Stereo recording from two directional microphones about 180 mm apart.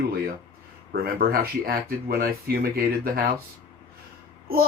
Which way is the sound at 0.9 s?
55° right (ahead or behind).